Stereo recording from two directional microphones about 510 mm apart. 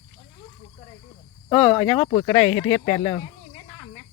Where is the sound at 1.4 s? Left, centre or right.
Centre.